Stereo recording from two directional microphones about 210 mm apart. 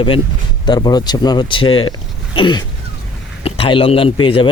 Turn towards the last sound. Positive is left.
turn(degrees=25)  # may be behind; listen again after turning